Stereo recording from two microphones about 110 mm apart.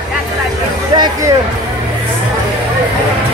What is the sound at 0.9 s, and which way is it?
Speech, 40° right (ahead or behind).